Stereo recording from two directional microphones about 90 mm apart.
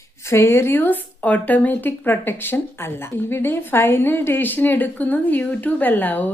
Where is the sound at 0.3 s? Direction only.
30° left (ahead or behind).